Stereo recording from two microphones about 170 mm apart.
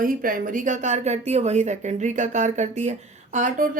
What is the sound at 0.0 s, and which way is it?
Speech, 55° right (ahead or behind).